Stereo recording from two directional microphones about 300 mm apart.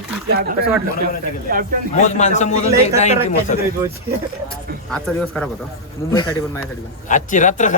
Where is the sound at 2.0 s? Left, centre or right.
Left.